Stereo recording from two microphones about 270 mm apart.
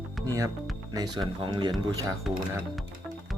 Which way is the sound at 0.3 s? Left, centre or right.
Centre.